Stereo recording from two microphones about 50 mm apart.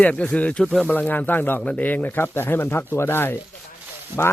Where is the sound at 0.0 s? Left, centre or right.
Left.